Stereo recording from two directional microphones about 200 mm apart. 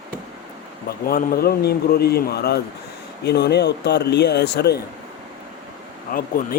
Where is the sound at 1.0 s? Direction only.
50° left (ahead or behind).